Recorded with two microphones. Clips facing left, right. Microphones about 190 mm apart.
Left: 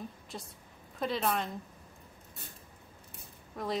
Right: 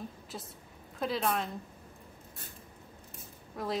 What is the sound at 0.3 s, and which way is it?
A woman's voice, 5° right (ahead or behind).